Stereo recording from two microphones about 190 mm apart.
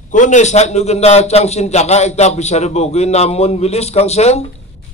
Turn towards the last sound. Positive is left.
turn(degrees=35)  # may be behind; listen again after turning